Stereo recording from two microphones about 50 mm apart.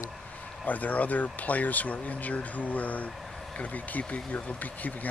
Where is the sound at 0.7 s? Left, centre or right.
Left.